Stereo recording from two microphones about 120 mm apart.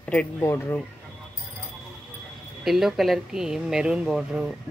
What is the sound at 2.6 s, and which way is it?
Speech, centre (ahead or behind).